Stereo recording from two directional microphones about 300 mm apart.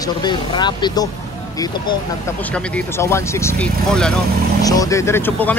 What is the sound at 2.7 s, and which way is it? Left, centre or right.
Speech, centre.